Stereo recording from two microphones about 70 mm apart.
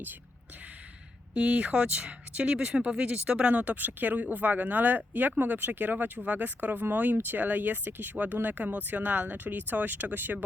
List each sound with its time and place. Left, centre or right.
1.4 s speech: centre